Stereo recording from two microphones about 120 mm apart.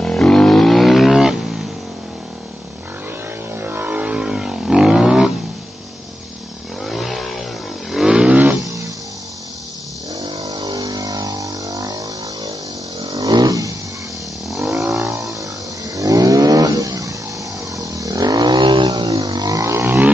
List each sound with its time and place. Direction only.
0.0 s wild animals: 5° left (ahead or behind)
3.5 s wild animals: 15° right (ahead or behind)
6.8 s vehicle: centre (ahead or behind)
10.4 s vehicle: 35° right (ahead or behind)
13.0 s vehicle: 30° right (ahead or behind)
14.9 s vehicle: 25° right (ahead or behind)